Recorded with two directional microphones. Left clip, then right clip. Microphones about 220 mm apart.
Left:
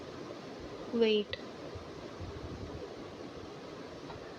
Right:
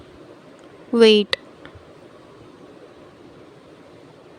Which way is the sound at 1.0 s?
60° right (ahead or behind).